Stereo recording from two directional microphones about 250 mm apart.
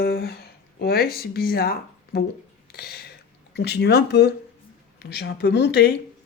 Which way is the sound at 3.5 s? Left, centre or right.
Left.